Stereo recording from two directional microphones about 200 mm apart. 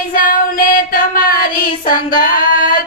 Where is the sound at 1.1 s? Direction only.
45° left (ahead or behind).